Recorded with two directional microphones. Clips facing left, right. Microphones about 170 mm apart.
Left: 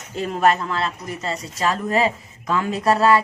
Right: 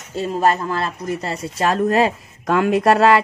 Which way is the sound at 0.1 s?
30° right (ahead or behind).